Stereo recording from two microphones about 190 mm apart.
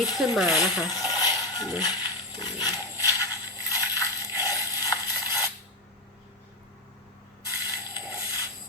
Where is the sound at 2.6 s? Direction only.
15° left (ahead or behind).